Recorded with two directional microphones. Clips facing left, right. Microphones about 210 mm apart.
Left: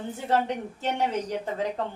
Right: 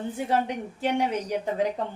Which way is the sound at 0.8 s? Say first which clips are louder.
Right 3 dB; 15° right (ahead or behind).